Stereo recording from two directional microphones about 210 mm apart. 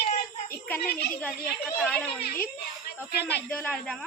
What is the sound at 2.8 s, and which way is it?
Speech, 50° left (ahead or behind).